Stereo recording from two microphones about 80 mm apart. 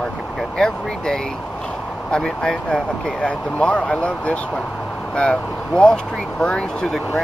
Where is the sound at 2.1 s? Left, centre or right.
Centre.